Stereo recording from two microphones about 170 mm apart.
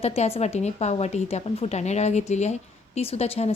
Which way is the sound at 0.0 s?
40° left (ahead or behind).